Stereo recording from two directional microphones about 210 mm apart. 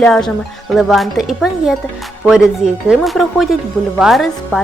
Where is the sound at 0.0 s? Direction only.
5° left (ahead or behind).